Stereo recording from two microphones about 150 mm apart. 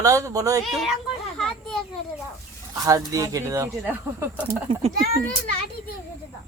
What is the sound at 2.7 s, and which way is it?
Speech, 20° right (ahead or behind).